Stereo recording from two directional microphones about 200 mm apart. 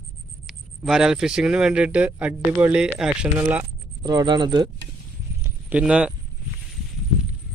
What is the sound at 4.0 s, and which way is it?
Speech, 20° right (ahead or behind).